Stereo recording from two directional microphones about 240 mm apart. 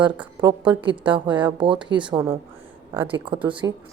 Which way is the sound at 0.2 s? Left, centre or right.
Centre.